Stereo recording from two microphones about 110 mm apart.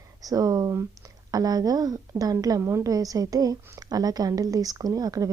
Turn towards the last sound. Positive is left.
turn(degrees=-35)  # may be behind; listen again after turning